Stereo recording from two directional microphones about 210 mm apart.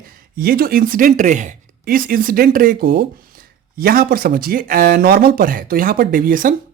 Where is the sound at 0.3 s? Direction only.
45° right (ahead or behind).